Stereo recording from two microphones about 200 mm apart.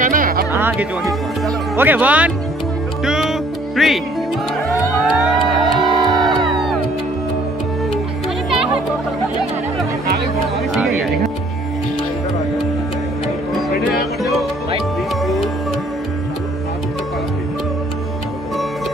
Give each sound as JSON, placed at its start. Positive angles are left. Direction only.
{"t": 0.0, "sound": "music", "side_deg": -45}
{"t": 0.5, "sound": "speech", "side_deg": -10}
{"t": 3.1, "sound": "music", "side_deg": 0}
{"t": 5.1, "sound": "music", "side_deg": 0}
{"t": 8.5, "sound": "music", "side_deg": -5}
{"t": 10.7, "sound": "music", "side_deg": 0}